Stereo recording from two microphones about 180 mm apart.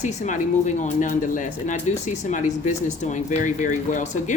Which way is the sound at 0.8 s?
45° left (ahead or behind).